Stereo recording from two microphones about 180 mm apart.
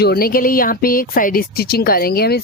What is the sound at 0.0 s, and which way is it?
Speech, 60° left (ahead or behind).